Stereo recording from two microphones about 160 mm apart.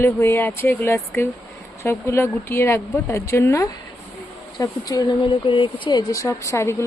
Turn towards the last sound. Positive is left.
turn(degrees=20)  # may be behind; listen again after turning